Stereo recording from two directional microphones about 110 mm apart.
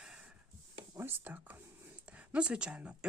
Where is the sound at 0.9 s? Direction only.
20° right (ahead or behind).